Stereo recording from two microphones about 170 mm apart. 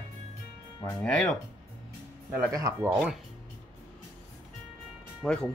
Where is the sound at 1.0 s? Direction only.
5° left (ahead or behind).